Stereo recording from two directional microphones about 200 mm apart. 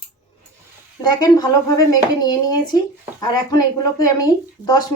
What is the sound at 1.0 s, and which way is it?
Speech, 20° left (ahead or behind).